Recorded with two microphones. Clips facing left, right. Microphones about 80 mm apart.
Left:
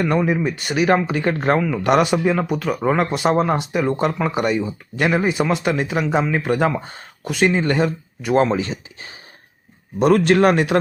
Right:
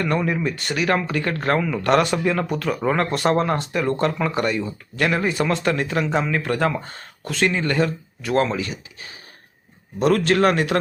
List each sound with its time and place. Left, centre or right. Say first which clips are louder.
0.0 s speech: left 3 dB; centre